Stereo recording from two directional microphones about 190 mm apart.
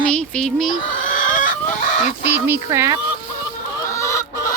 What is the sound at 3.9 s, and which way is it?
Chicken, 15° left (ahead or behind).